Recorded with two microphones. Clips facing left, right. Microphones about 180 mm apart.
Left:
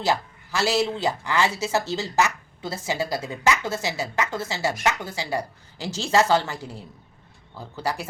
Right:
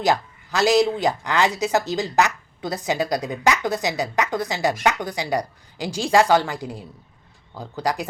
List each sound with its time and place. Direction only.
0.0 s speech: 15° right (ahead or behind)